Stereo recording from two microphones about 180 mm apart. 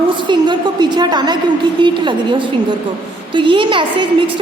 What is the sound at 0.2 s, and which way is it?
A woman's voice, 25° right (ahead or behind).